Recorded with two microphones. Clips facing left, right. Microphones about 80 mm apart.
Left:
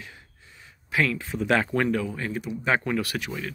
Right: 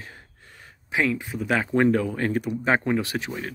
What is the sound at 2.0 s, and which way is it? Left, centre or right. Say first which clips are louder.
Speech: right 5 dB; right.